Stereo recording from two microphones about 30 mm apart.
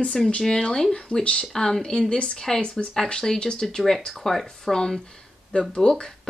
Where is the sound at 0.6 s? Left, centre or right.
Left.